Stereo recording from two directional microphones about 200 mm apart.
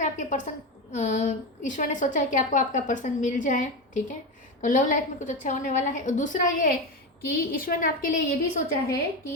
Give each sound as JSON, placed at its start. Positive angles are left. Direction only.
{"t": 0.0, "sound": "a woman's voice", "side_deg": 40}